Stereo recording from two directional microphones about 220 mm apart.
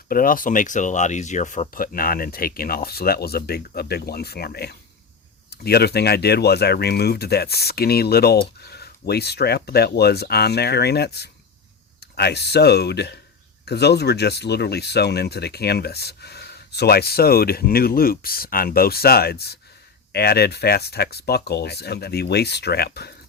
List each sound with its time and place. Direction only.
0.1 s speech: 40° left (ahead or behind)